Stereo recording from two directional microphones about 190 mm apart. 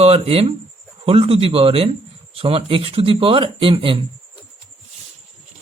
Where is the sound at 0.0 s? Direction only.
30° right (ahead or behind).